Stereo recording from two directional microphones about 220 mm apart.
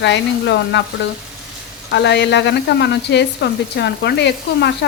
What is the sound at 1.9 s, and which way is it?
Speech, 50° left (ahead or behind).